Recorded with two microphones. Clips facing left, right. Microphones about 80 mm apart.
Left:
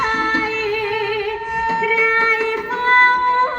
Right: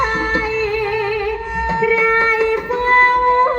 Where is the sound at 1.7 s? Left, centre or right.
Centre.